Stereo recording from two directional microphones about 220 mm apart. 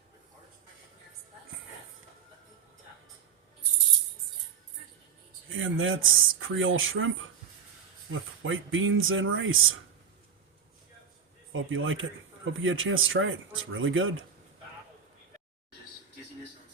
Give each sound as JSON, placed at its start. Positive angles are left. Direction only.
{"t": 5.5, "sound": "speech", "side_deg": -60}
{"t": 8.1, "sound": "speech", "side_deg": -65}
{"t": 11.5, "sound": "speech", "side_deg": -65}